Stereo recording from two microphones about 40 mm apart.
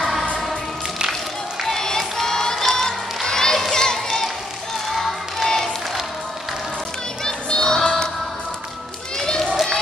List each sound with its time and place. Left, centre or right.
0.0 s music: centre
1.6 s crowd: centre
3.7 s music: centre
4.9 s crowd: centre
7.2 s music: centre
9.2 s children playing: centre